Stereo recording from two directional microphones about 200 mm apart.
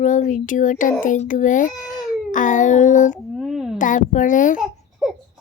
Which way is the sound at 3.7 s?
40° left (ahead or behind).